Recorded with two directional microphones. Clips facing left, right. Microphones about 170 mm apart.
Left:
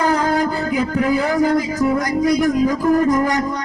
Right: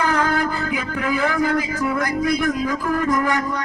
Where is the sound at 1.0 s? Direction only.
35° left (ahead or behind).